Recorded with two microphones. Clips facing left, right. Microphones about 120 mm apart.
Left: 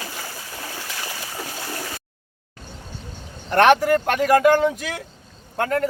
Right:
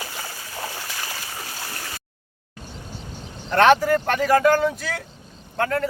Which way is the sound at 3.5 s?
15° left (ahead or behind).